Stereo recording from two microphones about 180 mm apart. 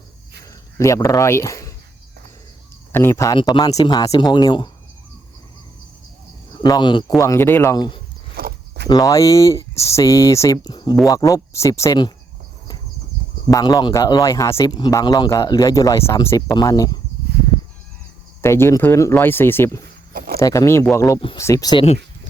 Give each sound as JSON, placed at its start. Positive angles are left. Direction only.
{"t": 0.8, "sound": "speech", "side_deg": 15}
{"t": 2.9, "sound": "speech", "side_deg": 15}
{"t": 6.5, "sound": "speech", "side_deg": 25}
{"t": 8.4, "sound": "a sound", "side_deg": -60}
{"t": 8.9, "sound": "speech", "side_deg": 20}
{"t": 13.5, "sound": "speech", "side_deg": 20}
{"t": 18.4, "sound": "speech", "side_deg": 15}
{"t": 19.8, "sound": "a sound", "side_deg": -55}
{"t": 20.4, "sound": "speech", "side_deg": 20}